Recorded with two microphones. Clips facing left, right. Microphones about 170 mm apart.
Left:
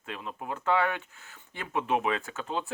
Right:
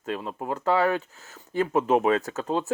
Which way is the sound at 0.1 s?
40° right (ahead or behind).